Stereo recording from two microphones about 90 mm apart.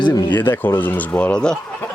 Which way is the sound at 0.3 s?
20° left (ahead or behind).